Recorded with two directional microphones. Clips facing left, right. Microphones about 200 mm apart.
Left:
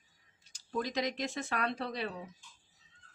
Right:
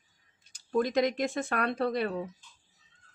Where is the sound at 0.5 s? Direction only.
55° right (ahead or behind).